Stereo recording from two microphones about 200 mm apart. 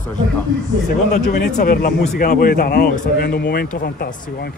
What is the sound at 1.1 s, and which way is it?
Speech, 35° left (ahead or behind).